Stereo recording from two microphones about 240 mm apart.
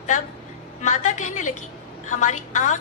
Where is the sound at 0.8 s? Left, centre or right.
Left.